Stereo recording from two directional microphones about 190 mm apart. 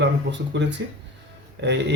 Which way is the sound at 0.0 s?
70° right (ahead or behind).